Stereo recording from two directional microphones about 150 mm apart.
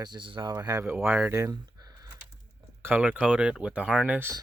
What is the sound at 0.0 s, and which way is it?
Speech, 30° right (ahead or behind).